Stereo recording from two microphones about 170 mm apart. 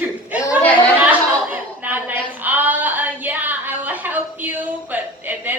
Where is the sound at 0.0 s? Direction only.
10° right (ahead or behind).